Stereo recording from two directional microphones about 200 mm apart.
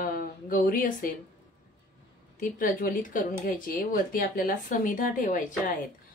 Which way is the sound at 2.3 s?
45° left (ahead or behind).